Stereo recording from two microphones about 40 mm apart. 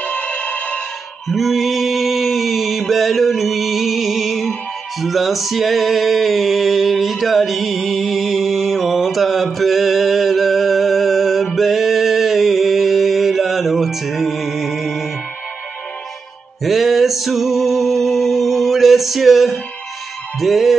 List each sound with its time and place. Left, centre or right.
0.0 s music: left
1.3 s music: centre
16.6 s music: centre